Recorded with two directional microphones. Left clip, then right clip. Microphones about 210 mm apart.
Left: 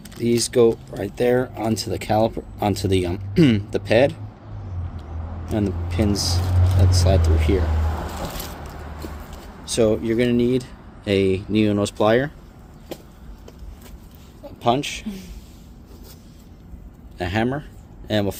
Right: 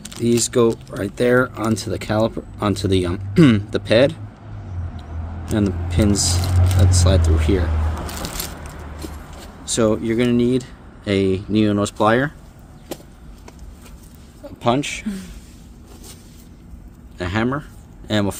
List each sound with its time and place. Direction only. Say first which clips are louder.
0.0 s speech: right 2 dB; 25° right (ahead or behind)
5.5 s speech: right 3 dB; 15° right (ahead or behind)
9.6 s speech: right 1 dB; 25° right (ahead or behind)
14.4 s speech: right 1 dB; 25° right (ahead or behind)
17.2 s speech: right 1 dB; 15° right (ahead or behind)